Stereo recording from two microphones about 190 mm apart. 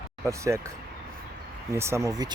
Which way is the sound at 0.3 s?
15° right (ahead or behind).